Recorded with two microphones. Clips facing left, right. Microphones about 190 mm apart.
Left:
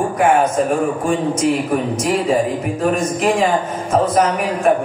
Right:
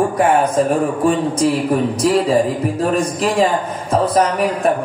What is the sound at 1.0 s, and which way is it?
Speech, 35° right (ahead or behind).